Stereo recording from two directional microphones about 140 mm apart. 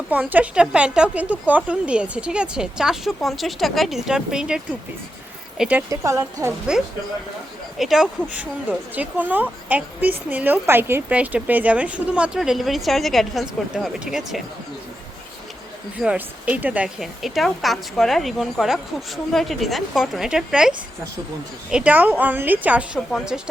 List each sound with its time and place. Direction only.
0.1 s a woman's voice: 10° right (ahead or behind)
5.9 s speech: 20° right (ahead or behind)
7.8 s a woman's voice: centre (ahead or behind)
16.0 s a woman's voice: 10° right (ahead or behind)